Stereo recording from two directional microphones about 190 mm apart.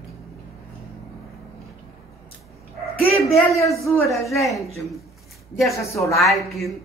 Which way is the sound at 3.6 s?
Centre (ahead or behind).